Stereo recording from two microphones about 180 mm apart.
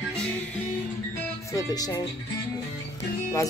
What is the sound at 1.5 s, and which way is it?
Music, 20° left (ahead or behind).